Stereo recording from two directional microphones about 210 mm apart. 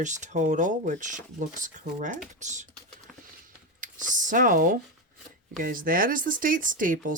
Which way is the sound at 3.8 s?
40° right (ahead or behind).